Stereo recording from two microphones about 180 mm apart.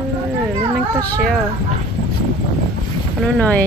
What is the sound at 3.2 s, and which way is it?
Speech, 5° left (ahead or behind).